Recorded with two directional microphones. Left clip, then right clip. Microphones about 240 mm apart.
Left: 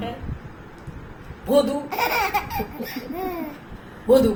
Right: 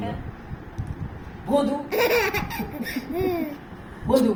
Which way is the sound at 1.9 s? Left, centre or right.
Centre.